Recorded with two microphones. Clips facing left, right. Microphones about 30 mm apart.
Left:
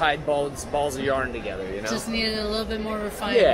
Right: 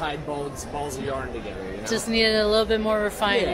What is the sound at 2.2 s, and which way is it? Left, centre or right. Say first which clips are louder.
Speech: right 7 dB; right.